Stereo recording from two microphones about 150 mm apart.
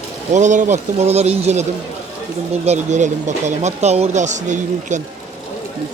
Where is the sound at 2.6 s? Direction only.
50° right (ahead or behind).